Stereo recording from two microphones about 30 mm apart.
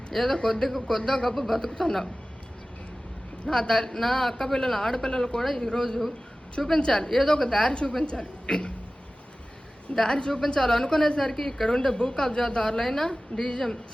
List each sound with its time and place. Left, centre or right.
0.2 s a woman's voice: left
0.5 s a man's voice: centre
3.4 s a man's voice: left
7.6 s a woman's voice: left
9.9 s a man's voice: centre
10.2 s a woman's voice: left
13.3 s a woman's voice: left